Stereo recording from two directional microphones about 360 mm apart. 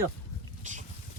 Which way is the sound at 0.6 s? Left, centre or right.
Centre.